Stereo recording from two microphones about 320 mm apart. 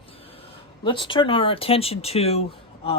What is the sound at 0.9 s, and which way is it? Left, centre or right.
Speech, centre.